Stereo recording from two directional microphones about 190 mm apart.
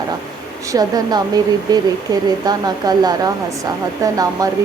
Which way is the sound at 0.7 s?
20° right (ahead or behind).